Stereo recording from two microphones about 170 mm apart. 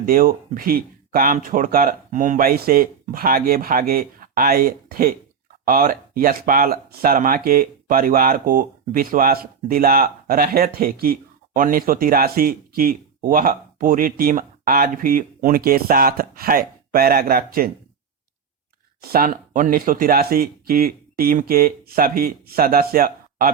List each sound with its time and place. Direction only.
0.0 s speech: 55° right (ahead or behind)
19.0 s speech: 60° right (ahead or behind)